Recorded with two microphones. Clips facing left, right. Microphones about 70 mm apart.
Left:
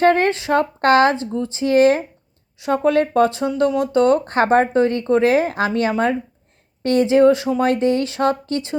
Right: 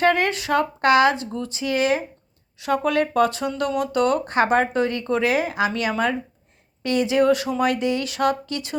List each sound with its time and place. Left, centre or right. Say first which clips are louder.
0.0 s speech: left 4 dB; left
2.6 s speech: left 4 dB; left